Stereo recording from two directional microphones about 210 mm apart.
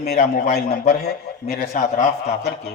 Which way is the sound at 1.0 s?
45° left (ahead or behind).